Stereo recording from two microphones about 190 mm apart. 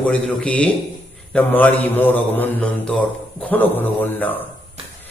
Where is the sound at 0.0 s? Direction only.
5° left (ahead or behind).